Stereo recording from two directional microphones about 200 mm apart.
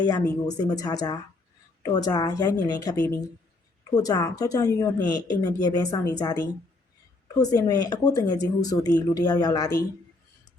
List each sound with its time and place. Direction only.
0.0 s speech: 20° left (ahead or behind)